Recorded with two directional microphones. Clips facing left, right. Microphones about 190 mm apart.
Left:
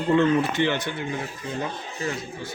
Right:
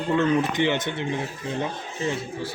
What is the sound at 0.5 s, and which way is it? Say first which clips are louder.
Speech: right 1 dB; 15° right (ahead or behind).